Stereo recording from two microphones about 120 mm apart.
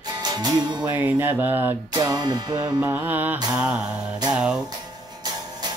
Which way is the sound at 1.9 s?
35° right (ahead or behind).